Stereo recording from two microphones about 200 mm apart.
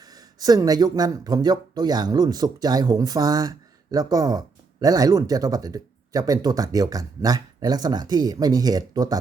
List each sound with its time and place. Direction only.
0.0 s speech: 20° right (ahead or behind)